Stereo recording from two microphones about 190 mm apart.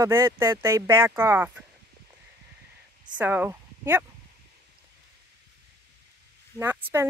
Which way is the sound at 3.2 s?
10° right (ahead or behind).